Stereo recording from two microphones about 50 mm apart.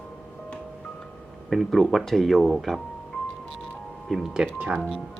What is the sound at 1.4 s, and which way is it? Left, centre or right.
Speech, centre.